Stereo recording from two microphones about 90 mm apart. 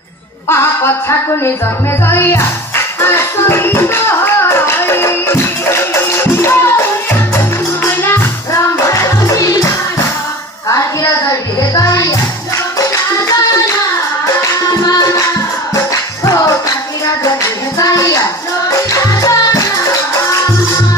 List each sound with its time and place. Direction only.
0.5 s music: 30° left (ahead or behind)
8.8 s music: 35° left (ahead or behind)
11.7 s music: 40° left (ahead or behind)
15.7 s music: 35° left (ahead or behind)
17.7 s a sound: 40° left (ahead or behind)
18.9 s music: 40° left (ahead or behind)